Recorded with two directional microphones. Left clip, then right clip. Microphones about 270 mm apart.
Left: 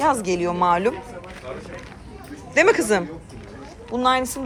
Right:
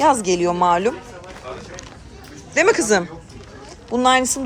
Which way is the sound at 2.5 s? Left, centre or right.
Centre.